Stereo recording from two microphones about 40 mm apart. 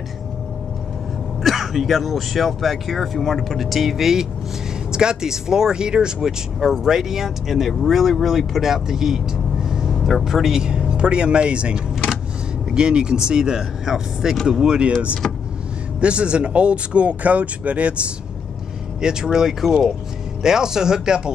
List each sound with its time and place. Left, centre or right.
1.4 s speech: centre
6.6 s speech: centre
14.3 s speech: centre
16.0 s speech: right
19.0 s speech: centre